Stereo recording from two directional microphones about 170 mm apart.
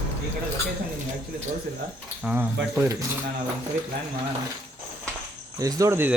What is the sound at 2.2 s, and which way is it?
Speech, 10° right (ahead or behind).